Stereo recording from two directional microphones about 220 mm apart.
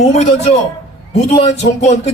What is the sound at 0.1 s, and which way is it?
A man's voice, 30° left (ahead or behind).